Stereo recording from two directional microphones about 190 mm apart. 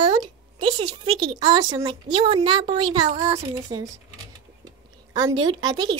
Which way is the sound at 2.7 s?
25° right (ahead or behind).